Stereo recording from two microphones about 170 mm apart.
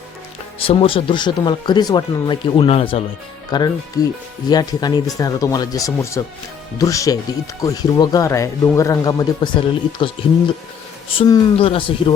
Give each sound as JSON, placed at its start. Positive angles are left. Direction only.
{"t": 0.6, "sound": "speech", "side_deg": 35}
{"t": 3.5, "sound": "speech", "side_deg": 25}
{"t": 11.2, "sound": "speech", "side_deg": 20}
{"t": 11.6, "sound": "speech", "side_deg": 35}